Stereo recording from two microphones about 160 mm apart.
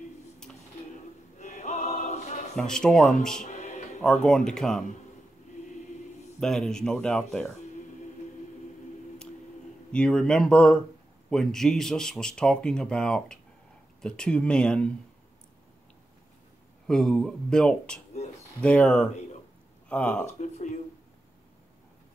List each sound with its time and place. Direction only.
1.4 s choir: 45° left (ahead or behind)
2.5 s speech: 5° left (ahead or behind)
3.4 s music: 50° left (ahead or behind)
4.0 s speech: 5° left (ahead or behind)
6.4 s speech: 5° left (ahead or behind)
9.9 s speech: 5° left (ahead or behind)
16.8 s speech: 5° left (ahead or behind)
20.3 s speech: 50° left (ahead or behind)